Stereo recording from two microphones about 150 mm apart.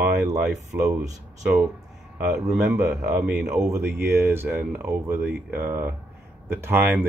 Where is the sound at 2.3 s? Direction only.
5° right (ahead or behind).